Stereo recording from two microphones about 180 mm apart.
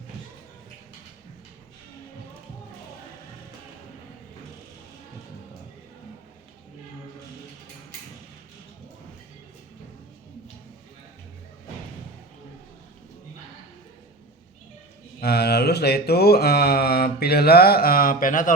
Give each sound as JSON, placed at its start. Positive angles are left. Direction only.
{"t": 15.2, "sound": "mantra", "side_deg": 60}